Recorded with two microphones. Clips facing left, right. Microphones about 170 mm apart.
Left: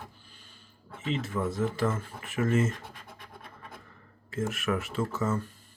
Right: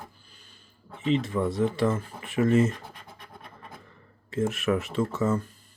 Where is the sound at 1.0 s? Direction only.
35° right (ahead or behind).